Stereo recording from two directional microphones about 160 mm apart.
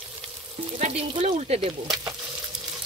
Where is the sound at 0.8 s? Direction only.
45° right (ahead or behind).